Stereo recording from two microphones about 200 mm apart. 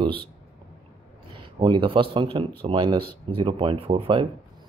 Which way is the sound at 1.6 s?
25° right (ahead or behind).